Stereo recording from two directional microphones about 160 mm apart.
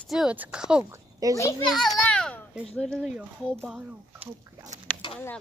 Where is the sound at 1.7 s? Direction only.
5° left (ahead or behind).